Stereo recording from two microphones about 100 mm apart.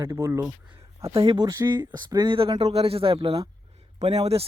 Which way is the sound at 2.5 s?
75° right (ahead or behind).